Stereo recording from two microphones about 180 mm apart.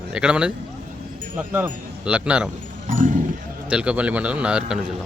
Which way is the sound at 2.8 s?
45° right (ahead or behind).